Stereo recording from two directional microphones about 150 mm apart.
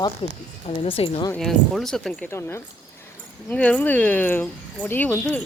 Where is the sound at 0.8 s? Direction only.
35° left (ahead or behind).